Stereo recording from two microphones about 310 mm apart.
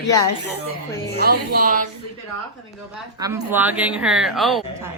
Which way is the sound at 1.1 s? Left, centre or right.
Right.